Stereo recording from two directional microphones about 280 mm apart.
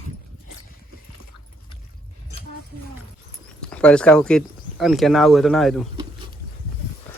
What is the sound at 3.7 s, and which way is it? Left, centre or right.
Speech, centre.